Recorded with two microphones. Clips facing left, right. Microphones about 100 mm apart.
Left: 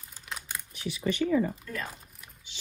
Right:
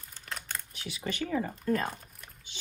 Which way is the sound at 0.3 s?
5° left (ahead or behind).